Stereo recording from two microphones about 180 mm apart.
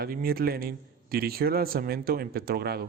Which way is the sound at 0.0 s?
55° right (ahead or behind).